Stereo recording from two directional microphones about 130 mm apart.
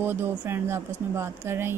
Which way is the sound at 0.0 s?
15° right (ahead or behind).